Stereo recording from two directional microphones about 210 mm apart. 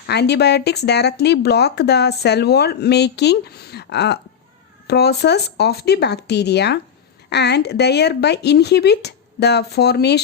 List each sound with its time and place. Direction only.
0.1 s speech: 50° left (ahead or behind)